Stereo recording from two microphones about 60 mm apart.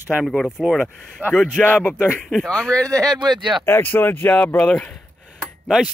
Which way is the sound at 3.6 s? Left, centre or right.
Left.